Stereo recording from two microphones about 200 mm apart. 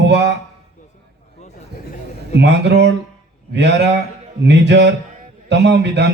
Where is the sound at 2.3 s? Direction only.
60° right (ahead or behind).